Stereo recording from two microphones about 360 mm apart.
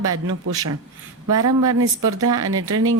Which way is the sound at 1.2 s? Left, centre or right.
Right.